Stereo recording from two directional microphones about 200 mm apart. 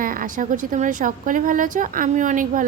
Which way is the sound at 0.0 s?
45° right (ahead or behind).